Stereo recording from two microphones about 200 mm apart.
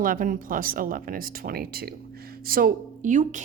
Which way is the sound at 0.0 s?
45° right (ahead or behind).